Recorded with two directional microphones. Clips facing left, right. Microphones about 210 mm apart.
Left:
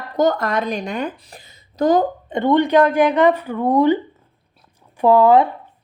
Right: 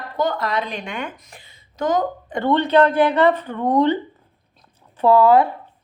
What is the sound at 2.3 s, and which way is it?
Speech, 15° left (ahead or behind).